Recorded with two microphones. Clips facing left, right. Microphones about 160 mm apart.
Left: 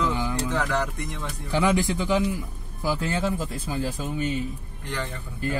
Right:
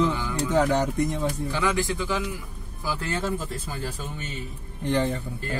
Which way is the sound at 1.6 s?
20° left (ahead or behind).